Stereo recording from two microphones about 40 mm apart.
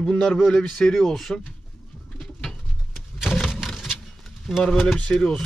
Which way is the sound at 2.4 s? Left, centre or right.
Centre.